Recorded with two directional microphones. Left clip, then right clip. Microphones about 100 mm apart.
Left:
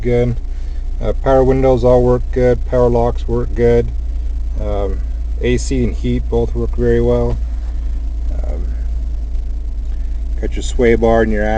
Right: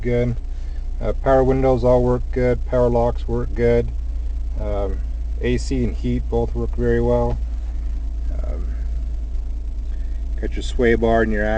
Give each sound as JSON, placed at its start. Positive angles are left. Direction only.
{"t": 0.0, "sound": "speech", "side_deg": 15}
{"t": 10.4, "sound": "speech", "side_deg": 5}